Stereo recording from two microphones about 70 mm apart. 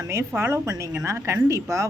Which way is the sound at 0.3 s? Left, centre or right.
Right.